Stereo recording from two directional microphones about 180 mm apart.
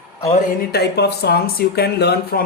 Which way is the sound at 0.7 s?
65° left (ahead or behind).